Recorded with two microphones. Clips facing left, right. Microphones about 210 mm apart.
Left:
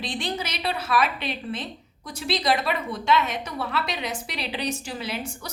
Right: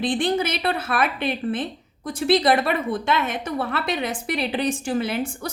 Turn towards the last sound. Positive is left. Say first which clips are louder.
# right 6 dB
turn(degrees=-50)  # may be behind; listen again after turning